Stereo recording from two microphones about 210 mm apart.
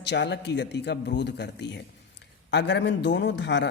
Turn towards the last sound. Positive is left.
turn(degrees=55)  # may be behind; listen again after turning